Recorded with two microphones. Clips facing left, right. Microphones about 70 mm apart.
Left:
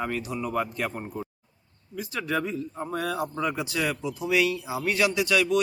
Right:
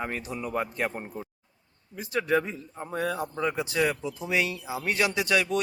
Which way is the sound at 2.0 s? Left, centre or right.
Right.